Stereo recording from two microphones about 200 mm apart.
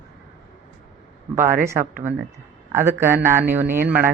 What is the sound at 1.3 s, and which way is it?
Speech, 10° right (ahead or behind).